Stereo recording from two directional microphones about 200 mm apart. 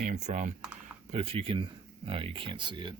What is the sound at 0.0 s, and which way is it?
Speech, 35° right (ahead or behind).